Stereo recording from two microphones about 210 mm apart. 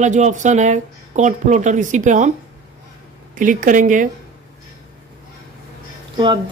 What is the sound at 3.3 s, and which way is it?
Speech, 40° right (ahead or behind).